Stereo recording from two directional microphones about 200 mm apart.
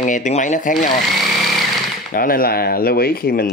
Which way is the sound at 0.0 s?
40° left (ahead or behind).